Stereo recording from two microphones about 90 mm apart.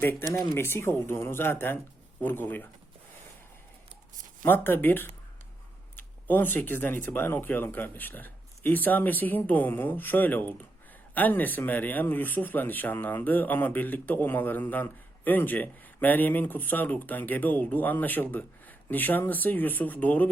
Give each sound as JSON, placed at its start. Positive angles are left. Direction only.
{"t": 0.0, "sound": "speech", "side_deg": 20}
{"t": 4.4, "sound": "speech", "side_deg": 20}